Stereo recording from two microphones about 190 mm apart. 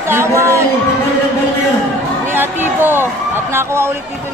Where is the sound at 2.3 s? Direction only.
10° right (ahead or behind).